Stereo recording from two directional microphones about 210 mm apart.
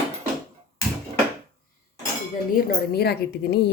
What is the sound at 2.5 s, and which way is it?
Speech, 45° left (ahead or behind).